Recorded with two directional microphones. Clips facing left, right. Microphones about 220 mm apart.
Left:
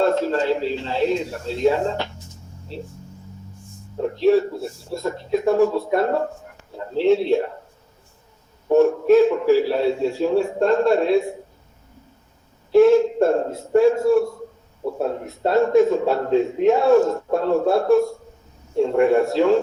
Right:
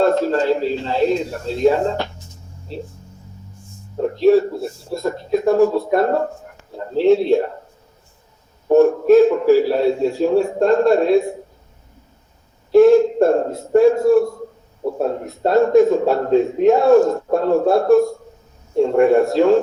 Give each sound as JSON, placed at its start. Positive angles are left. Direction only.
{"t": 0.0, "sound": "a man's voice", "side_deg": -40}
{"t": 4.1, "sound": "a man's voice", "side_deg": -40}
{"t": 8.7, "sound": "a man's voice", "side_deg": -40}
{"t": 12.7, "sound": "a man's voice", "side_deg": -40}